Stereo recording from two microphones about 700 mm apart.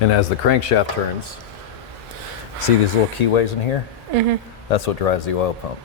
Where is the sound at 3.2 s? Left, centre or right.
Left.